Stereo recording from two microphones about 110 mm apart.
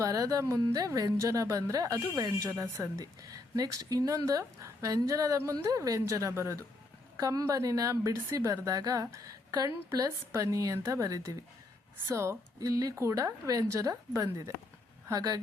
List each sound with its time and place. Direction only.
0.0 s speech: 35° right (ahead or behind)